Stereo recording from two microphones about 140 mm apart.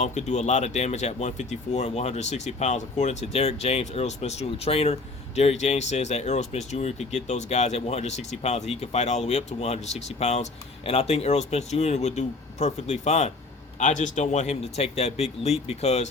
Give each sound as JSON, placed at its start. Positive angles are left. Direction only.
{"t": 0.0, "sound": "speech", "side_deg": 55}